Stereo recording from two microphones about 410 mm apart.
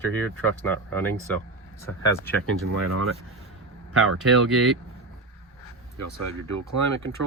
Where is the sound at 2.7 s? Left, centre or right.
Right.